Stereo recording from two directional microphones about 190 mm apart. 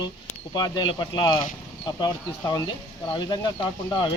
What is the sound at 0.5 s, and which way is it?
Speech, 20° left (ahead or behind).